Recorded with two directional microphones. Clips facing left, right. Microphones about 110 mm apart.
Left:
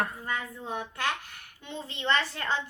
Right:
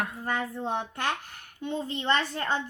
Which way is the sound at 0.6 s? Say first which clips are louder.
Right 4 dB; 60° right (ahead or behind).